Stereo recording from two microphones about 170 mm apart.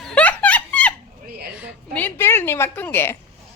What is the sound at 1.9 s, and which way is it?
A woman's voice, 10° left (ahead or behind).